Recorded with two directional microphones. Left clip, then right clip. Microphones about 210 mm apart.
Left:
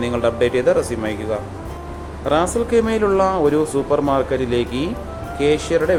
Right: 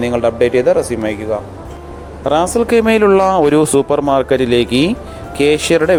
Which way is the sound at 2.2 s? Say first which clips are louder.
Right 5 dB; 30° right (ahead or behind).